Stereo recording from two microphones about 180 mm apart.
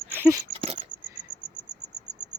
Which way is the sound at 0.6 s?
40° right (ahead or behind).